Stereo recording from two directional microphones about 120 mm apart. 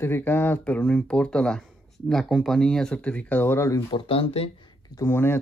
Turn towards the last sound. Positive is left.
turn(degrees=20)  # may be behind; listen again after turning